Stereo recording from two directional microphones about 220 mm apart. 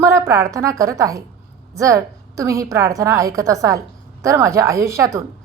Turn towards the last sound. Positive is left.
turn(degrees=-15)  # may be behind; listen again after turning